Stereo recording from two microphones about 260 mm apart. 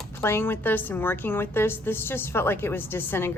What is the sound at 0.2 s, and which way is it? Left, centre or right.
A woman's voice, centre.